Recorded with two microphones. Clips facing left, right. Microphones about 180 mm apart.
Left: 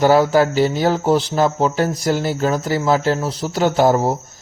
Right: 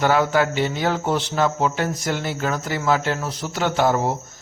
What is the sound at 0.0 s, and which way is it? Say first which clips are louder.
Speech: left 5 dB; 35° left (ahead or behind).